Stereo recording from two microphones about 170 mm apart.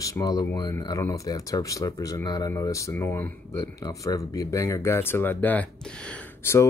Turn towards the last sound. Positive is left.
turn(degrees=15)  # may be behind; listen again after turning